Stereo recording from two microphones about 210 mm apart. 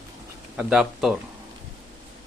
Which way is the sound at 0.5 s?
5° right (ahead or behind).